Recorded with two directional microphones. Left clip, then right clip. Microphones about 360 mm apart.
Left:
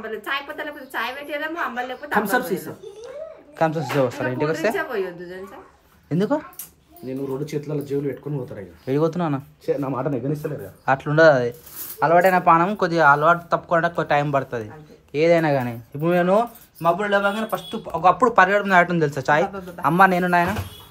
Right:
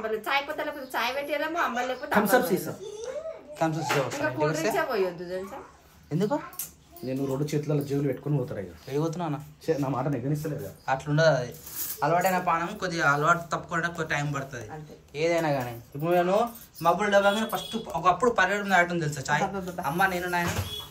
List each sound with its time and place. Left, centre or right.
0.0 s a woman's voice: centre
3.5 s speech: left
4.7 s a woman's voice: centre
6.0 s speech: left
7.1 s a woman's voice: centre
8.8 s speech: left
9.7 s speech: centre
10.4 s speech: left
15.1 s speech: left
16.8 s speech: centre